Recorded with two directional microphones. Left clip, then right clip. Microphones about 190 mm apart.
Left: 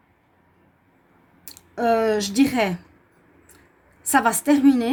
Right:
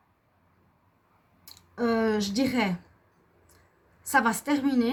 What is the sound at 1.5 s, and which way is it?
A woman's voice, 50° left (ahead or behind).